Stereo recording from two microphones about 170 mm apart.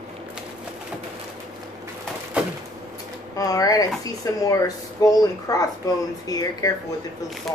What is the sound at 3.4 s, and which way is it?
Speech, 20° left (ahead or behind).